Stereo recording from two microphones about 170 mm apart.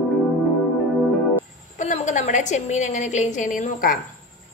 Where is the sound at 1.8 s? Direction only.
40° left (ahead or behind).